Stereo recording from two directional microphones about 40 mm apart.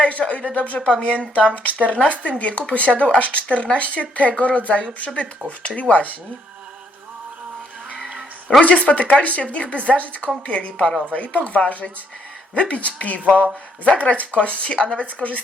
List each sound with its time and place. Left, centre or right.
0.0 s speech: left
0.8 s a woman's voice: centre
1.9 s speech: left
8.6 s a woman's voice: left